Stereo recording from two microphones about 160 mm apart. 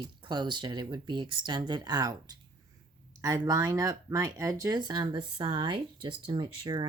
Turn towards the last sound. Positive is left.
turn(degrees=-30)  # may be behind; listen again after turning